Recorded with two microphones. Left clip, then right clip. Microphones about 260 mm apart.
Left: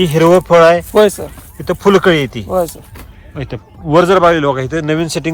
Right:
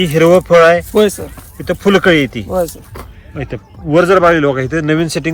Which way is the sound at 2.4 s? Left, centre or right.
Left.